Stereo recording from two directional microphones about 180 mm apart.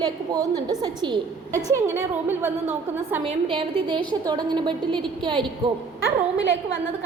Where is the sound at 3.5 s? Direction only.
25° right (ahead or behind).